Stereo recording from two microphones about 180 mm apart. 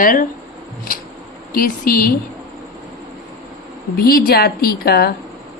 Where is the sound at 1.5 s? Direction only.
55° left (ahead or behind).